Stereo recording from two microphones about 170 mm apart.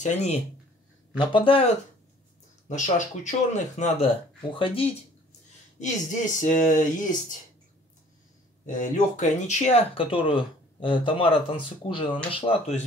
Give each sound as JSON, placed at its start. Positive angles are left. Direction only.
{"t": 0.0, "sound": "speech", "side_deg": 40}
{"t": 1.1, "sound": "speech", "side_deg": 30}
{"t": 2.7, "sound": "speech", "side_deg": 45}
{"t": 5.8, "sound": "speech", "side_deg": 45}
{"t": 8.6, "sound": "speech", "side_deg": 50}